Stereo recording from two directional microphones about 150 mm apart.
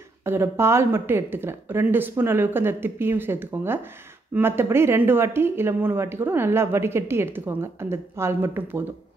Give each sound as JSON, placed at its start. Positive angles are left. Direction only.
{"t": 0.2, "sound": "speech", "side_deg": -15}